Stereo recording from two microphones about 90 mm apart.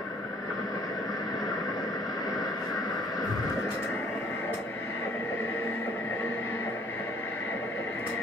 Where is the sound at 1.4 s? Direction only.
45° left (ahead or behind).